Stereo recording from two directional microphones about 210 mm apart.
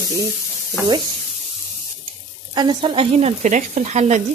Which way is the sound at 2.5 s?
20° right (ahead or behind).